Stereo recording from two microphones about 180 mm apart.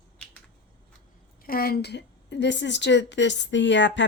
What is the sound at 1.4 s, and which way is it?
A woman's voice, 55° left (ahead or behind).